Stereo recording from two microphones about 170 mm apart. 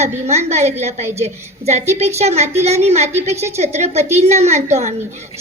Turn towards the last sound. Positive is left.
turn(degrees=-40)  # may be behind; listen again after turning